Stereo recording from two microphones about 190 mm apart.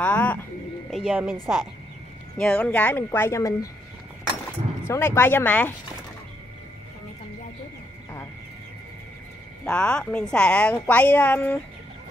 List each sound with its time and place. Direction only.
0.0 s a sound: 10° left (ahead or behind); by 1.4 s 5° right (ahead or behind)
1.4 s a woman's voice: centre (ahead or behind); by 3.7 s 15° left (ahead or behind)
4.8 s a woman's voice: 15° left (ahead or behind)
9.7 s a woman's voice: 5° left (ahead or behind)